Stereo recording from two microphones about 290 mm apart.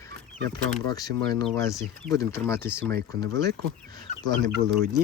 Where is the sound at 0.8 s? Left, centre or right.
Centre.